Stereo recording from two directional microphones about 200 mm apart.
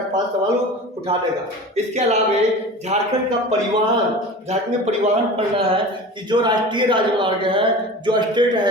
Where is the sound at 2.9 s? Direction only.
35° right (ahead or behind).